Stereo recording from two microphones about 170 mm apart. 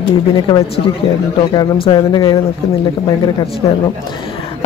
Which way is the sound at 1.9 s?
25° left (ahead or behind).